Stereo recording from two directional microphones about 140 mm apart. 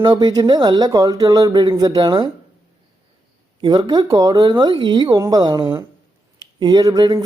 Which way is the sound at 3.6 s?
30° right (ahead or behind).